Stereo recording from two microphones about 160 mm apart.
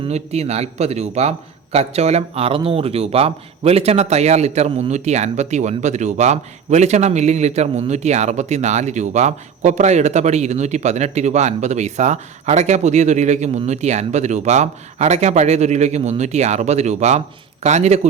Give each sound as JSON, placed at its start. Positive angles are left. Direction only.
{"t": 0.1, "sound": "a man's voice", "side_deg": -40}